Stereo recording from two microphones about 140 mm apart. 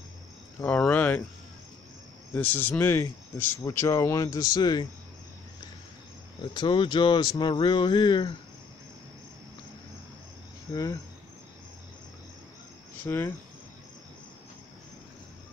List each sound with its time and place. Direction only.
0.6 s speech: 10° left (ahead or behind)
2.3 s speech: 15° left (ahead or behind); by 4.8 s 30° left (ahead or behind)
6.5 s speech: 35° left (ahead or behind)
10.7 s speech: 25° left (ahead or behind)
13.0 s speech: 15° left (ahead or behind)